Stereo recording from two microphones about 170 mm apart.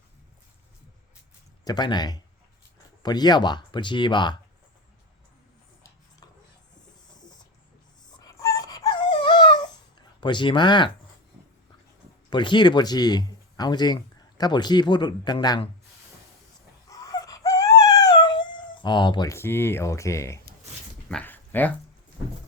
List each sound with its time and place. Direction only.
1.6 s speech: 25° left (ahead or behind)
8.2 s dog: 20° left (ahead or behind)
10.2 s speech: 25° left (ahead or behind)
12.3 s speech: 25° left (ahead or behind)
16.9 s a sound: 20° left (ahead or behind)
21.1 s dog: 10° left (ahead or behind)